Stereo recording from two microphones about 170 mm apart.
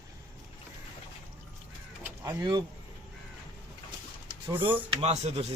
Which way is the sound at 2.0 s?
15° right (ahead or behind).